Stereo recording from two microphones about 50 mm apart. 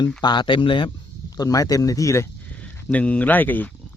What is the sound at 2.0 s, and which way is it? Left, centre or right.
Speech, left.